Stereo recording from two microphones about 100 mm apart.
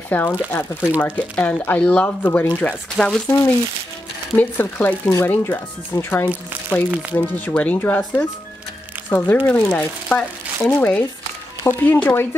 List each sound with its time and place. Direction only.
0.1 s speech: 15° left (ahead or behind)
4.4 s speech: 15° left (ahead or behind)
6.9 s speech: 15° right (ahead or behind)
7.2 s speech: 15° left (ahead or behind)